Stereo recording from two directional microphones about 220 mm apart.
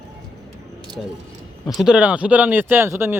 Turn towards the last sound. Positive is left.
turn(degrees=-10)  # may be behind; listen again after turning